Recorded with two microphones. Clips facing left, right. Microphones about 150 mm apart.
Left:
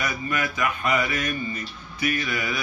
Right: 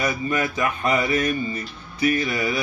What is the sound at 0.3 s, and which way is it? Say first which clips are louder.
Mantra: right 3 dB; 30° right (ahead or behind).